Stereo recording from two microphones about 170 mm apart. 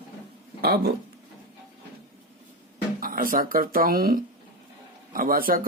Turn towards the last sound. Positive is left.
turn(degrees=-60)  # may be behind; listen again after turning